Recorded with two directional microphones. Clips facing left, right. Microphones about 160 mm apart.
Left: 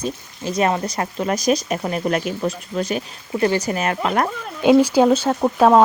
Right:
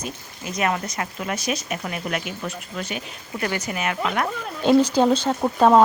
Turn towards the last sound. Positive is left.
turn(degrees=5)  # may be behind; listen again after turning